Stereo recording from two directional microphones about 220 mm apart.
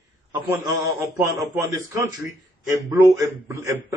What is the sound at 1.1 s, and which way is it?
A man's voice, 15° right (ahead or behind).